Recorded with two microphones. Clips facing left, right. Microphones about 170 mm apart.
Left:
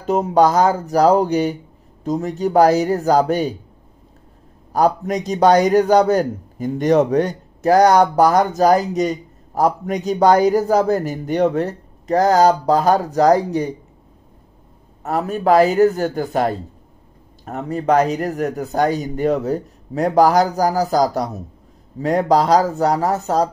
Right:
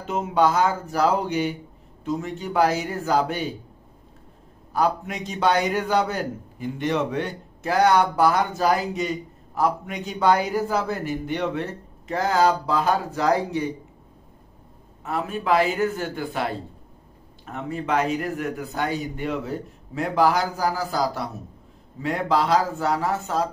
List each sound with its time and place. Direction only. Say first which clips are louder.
0.0 s a man's voice: left 6 dB; 40° left (ahead or behind)
4.7 s a man's voice: left 6 dB; 40° left (ahead or behind)
15.0 s a man's voice: left 7 dB; 40° left (ahead or behind)